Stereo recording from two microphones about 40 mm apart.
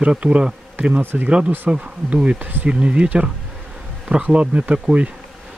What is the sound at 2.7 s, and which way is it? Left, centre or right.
Speech, right.